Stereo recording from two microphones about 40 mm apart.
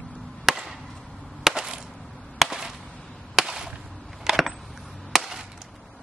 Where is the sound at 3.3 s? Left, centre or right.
Centre.